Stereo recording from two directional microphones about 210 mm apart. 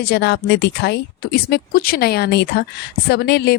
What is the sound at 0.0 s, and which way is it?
Speech, 50° left (ahead or behind).